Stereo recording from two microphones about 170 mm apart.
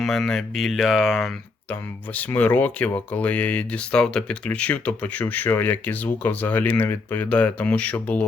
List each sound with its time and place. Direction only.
0.0 s speech: 5° left (ahead or behind)
1.7 s speech: 10° left (ahead or behind)